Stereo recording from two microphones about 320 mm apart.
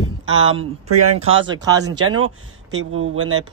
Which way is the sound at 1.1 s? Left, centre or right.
Centre.